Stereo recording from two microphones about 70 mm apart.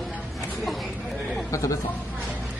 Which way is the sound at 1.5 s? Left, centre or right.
Left.